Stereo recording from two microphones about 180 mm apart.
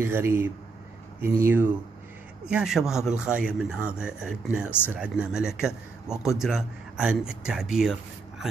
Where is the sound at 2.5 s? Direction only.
5° right (ahead or behind).